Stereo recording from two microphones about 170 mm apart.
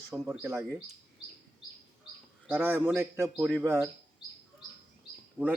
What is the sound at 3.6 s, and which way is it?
Speech, 15° right (ahead or behind).